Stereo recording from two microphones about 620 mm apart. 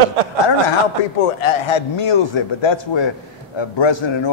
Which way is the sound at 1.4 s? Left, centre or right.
Left.